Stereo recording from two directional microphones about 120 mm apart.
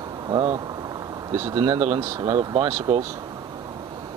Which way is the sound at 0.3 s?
35° right (ahead or behind).